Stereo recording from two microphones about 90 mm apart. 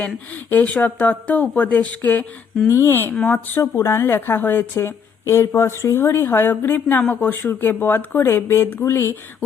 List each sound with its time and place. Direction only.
0.5 s a woman's voice: 15° left (ahead or behind)
3.6 s a woman's voice: 30° left (ahead or behind)